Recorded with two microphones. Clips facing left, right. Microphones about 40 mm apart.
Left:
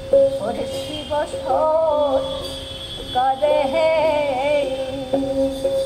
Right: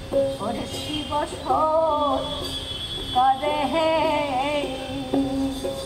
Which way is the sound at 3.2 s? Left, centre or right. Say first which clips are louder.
Left 7 dB; centre.